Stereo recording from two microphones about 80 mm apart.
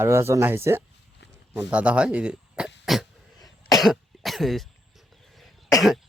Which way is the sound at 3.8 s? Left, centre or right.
Centre.